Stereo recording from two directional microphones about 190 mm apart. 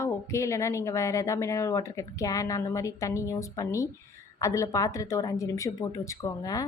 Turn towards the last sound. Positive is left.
turn(degrees=15)  # may be behind; listen again after turning